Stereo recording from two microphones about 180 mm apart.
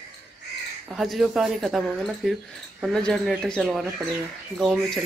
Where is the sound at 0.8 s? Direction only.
Centre (ahead or behind).